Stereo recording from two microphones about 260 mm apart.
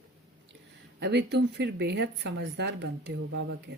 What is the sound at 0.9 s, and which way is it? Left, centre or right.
Speech, right.